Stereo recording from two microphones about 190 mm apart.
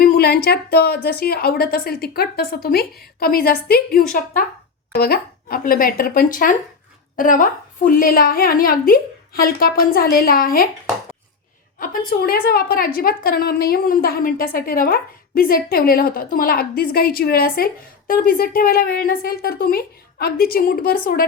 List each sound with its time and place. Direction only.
0.0 s a woman's voice: 55° left (ahead or behind)
11.8 s a woman's voice: 50° left (ahead or behind)